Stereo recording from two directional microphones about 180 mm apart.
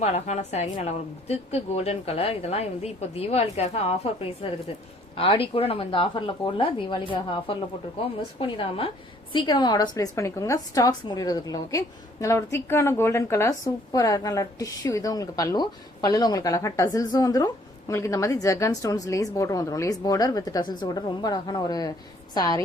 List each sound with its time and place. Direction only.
0.0 s a woman's voice: 40° left (ahead or behind); by 22.6 s 20° left (ahead or behind)